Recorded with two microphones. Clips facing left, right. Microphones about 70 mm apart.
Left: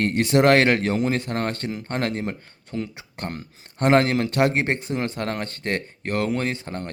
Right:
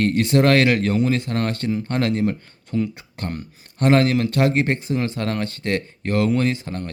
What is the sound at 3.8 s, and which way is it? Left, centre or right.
Speech, left.